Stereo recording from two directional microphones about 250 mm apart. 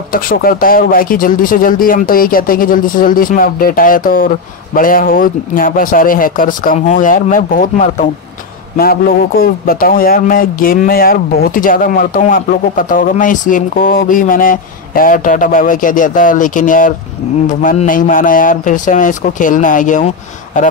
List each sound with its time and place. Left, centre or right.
0.1 s speech: left
9.4 s speech: left